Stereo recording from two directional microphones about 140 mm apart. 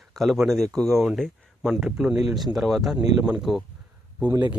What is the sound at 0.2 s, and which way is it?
Speech, centre (ahead or behind).